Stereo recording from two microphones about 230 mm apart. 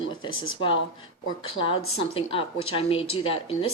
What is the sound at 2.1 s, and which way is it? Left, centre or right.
Speech, left.